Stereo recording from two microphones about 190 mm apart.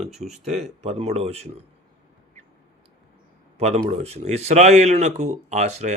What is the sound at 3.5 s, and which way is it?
Speech, 35° right (ahead or behind).